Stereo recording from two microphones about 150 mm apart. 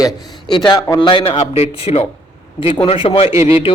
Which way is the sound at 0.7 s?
25° left (ahead or behind).